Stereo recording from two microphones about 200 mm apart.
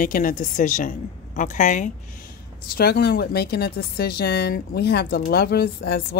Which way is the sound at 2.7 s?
50° left (ahead or behind).